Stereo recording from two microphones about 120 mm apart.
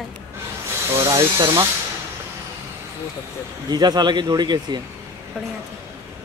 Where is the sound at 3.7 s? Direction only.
35° right (ahead or behind).